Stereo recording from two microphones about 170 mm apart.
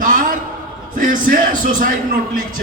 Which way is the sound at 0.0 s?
55° right (ahead or behind).